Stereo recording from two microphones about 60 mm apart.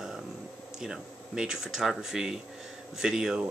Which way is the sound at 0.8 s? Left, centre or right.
Centre.